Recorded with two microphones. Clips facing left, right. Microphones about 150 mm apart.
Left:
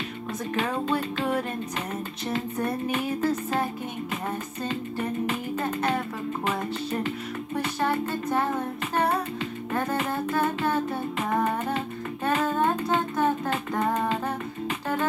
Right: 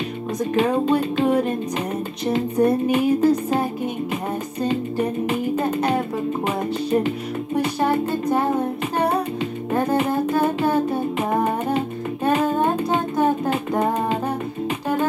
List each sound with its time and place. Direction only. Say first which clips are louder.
0.6 s music: right 8 dB; 20° right (ahead or behind)
4.6 s music: right 7 dB; 20° right (ahead or behind)